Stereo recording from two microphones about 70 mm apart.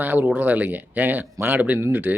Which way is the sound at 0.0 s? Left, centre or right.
Right.